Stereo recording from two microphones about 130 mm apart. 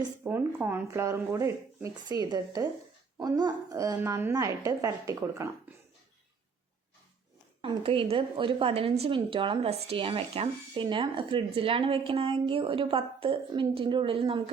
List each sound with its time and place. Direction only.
0.3 s speech: 15° right (ahead or behind)
7.6 s a woman's voice: 40° right (ahead or behind)